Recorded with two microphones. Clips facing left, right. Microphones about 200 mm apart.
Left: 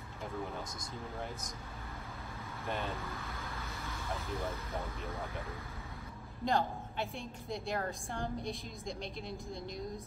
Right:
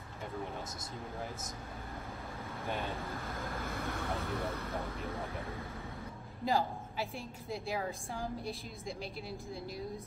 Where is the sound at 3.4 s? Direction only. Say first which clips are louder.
Right 5 dB; 50° right (ahead or behind).